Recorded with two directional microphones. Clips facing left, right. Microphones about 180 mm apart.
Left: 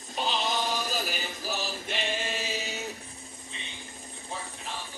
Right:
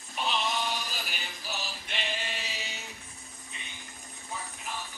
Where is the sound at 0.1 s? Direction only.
30° left (ahead or behind).